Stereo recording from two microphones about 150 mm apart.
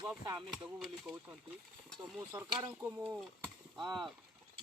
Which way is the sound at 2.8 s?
15° right (ahead or behind).